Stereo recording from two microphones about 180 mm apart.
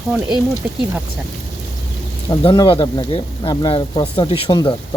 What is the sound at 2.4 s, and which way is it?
Speech, 30° left (ahead or behind).